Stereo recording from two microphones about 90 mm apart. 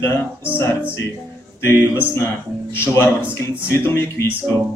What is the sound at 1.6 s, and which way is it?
Speech, 30° left (ahead or behind).